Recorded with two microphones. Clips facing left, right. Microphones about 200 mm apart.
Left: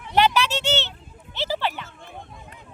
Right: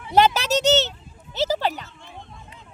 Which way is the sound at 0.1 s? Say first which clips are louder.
Right 2 dB; 40° right (ahead or behind).